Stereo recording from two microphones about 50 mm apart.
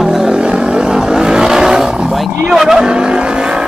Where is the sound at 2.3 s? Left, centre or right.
Right.